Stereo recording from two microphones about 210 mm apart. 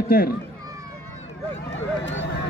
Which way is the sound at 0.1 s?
45° left (ahead or behind).